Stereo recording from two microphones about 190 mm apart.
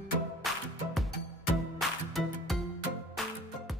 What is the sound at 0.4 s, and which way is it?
Music, centre (ahead or behind).